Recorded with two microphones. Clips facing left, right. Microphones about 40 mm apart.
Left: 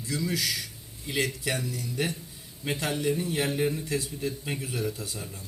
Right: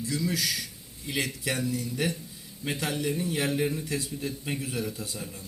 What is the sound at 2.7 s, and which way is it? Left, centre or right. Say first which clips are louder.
Speech: left 2 dB; left.